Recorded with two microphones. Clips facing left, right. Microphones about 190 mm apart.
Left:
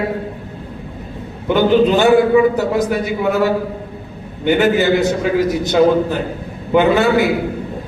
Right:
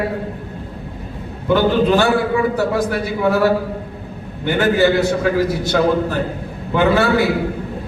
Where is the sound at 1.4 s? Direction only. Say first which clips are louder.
Left 2 dB; 20° left (ahead or behind).